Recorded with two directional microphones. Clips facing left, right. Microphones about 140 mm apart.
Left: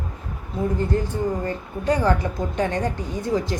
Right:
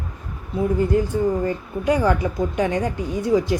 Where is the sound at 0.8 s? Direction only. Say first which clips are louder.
Right 4 dB; 10° right (ahead or behind).